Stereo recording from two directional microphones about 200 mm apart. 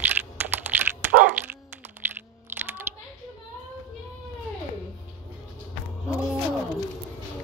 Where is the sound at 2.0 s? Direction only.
10° right (ahead or behind).